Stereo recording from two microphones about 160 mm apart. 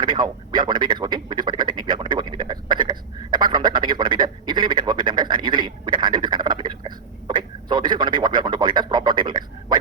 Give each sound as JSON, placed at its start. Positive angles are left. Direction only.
{"t": 0.0, "sound": "radio", "side_deg": -30}
{"t": 0.7, "sound": "a man's voice", "side_deg": -30}